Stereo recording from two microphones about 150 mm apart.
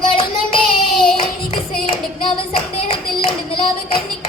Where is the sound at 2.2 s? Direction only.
40° left (ahead or behind).